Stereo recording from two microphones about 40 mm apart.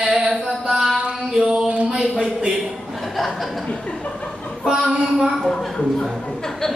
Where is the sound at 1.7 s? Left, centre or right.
Right.